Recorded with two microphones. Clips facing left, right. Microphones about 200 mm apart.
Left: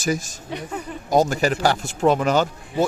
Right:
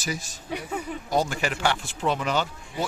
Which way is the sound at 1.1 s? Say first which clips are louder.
Left 8 dB; 45° left (ahead or behind).